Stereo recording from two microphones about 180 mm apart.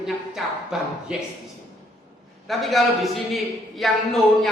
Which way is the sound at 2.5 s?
Centre (ahead or behind).